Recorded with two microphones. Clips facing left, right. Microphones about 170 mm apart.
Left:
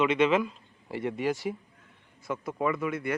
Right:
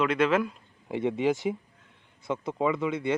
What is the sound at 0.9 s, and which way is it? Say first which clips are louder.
Speech: right 4 dB; 20° right (ahead or behind).